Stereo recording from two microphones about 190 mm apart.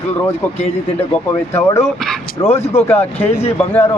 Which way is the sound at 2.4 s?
30° left (ahead or behind).